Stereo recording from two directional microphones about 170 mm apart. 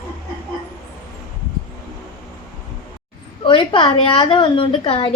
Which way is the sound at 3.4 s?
30° left (ahead or behind).